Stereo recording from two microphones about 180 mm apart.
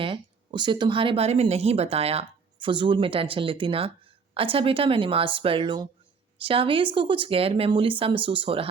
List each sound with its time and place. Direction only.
0.0 s speech: 25° right (ahead or behind)